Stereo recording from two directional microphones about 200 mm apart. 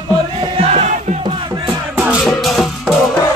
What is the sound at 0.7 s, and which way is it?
Crowd, 35° right (ahead or behind).